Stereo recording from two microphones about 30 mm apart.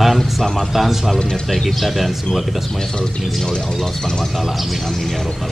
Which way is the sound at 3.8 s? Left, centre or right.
Centre.